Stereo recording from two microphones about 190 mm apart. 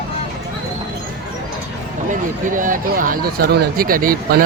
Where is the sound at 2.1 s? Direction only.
45° right (ahead or behind).